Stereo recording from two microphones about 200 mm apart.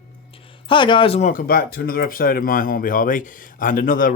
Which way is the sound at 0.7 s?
25° left (ahead or behind).